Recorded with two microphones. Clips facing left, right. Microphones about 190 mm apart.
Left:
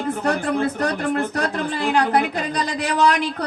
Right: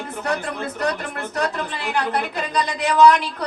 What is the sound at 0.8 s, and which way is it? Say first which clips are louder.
Speech: left 4 dB; 50° left (ahead or behind).